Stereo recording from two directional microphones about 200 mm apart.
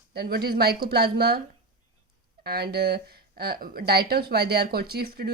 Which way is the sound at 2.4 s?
50° right (ahead or behind).